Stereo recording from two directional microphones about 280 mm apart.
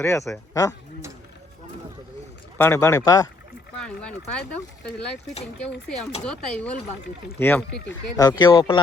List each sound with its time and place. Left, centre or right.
0.0 s speech: centre
2.6 s speech: centre
6.2 s speech: centre
7.7 s speech: left
8.1 s speech: centre